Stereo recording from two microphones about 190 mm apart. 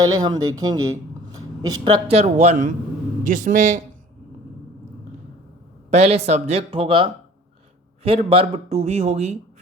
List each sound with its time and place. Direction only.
0.0 s speech: 20° right (ahead or behind)
1.8 s a man's voice: 35° right (ahead or behind)
5.9 s speech: 35° right (ahead or behind)